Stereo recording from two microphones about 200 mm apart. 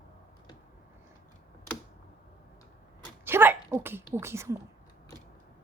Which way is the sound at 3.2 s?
10° right (ahead or behind).